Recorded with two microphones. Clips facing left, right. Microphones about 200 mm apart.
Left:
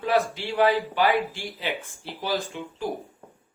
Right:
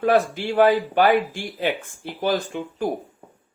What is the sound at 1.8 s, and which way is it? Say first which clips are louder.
Speech: right 8 dB; 50° right (ahead or behind).